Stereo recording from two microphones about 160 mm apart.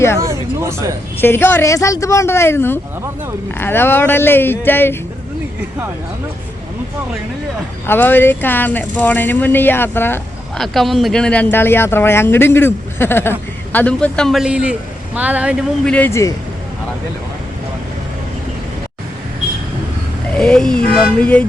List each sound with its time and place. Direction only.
0.2 s speech: 20° right (ahead or behind)
1.2 s speech: 15° left (ahead or behind)
7.9 s speech: 10° left (ahead or behind)
10.6 s a man's voice: centre (ahead or behind)
15.8 s speech: 10° left (ahead or behind)
20.3 s speech: 5° left (ahead or behind)